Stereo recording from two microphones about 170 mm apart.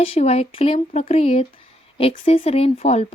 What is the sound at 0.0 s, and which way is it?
Speech, 35° left (ahead or behind).